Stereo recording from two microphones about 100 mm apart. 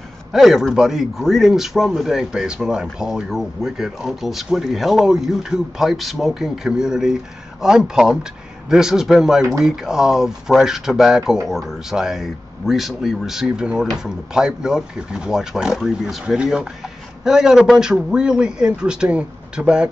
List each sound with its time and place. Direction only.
0.3 s speech: 5° right (ahead or behind)